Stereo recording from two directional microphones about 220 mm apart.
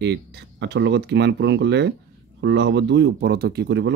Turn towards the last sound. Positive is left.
turn(degrees=-50)  # may be behind; listen again after turning